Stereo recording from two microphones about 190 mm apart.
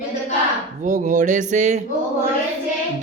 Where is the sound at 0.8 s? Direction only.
40° right (ahead or behind).